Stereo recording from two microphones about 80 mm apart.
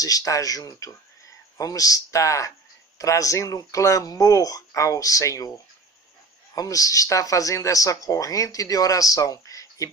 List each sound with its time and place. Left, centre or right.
0.0 s speech: left
6.5 s speech: left